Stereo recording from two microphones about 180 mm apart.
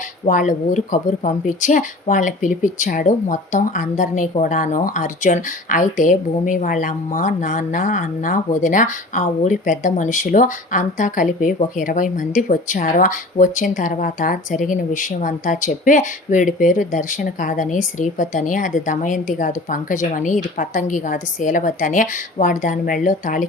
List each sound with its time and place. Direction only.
0.3 s speech: 45° left (ahead or behind)